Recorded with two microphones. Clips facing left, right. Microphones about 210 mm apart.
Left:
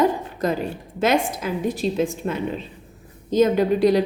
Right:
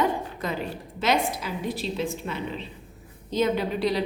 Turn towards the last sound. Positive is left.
turn(degrees=45)  # may be behind; listen again after turning